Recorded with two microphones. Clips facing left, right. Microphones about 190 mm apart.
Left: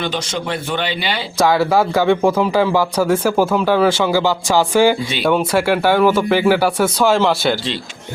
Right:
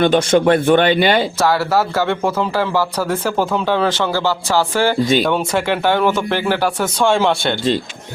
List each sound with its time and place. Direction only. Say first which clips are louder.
0.0 s speech: right 10 dB; 55° right (ahead or behind)
1.4 s speech: left 2 dB; 15° left (ahead or behind)